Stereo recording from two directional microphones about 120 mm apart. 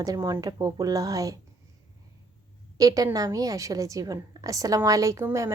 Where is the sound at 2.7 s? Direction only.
30° right (ahead or behind).